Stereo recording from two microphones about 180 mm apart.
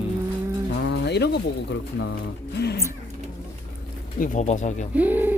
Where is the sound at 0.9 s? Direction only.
70° left (ahead or behind).